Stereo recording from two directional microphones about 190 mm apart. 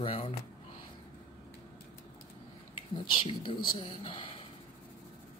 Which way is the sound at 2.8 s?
25° left (ahead or behind).